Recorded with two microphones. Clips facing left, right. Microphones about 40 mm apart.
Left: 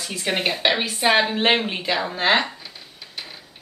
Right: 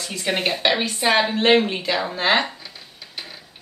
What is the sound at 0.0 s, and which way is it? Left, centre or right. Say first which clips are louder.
A woman's voice: even; centre.